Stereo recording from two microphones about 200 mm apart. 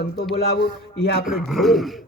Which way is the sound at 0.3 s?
50° left (ahead or behind).